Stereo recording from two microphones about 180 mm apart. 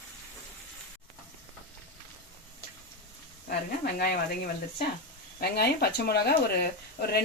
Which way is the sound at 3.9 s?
55° left (ahead or behind).